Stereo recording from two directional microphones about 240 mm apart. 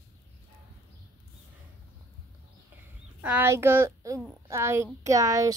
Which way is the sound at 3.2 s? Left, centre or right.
Centre.